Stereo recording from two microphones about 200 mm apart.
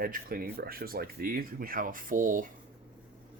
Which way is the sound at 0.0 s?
45° right (ahead or behind).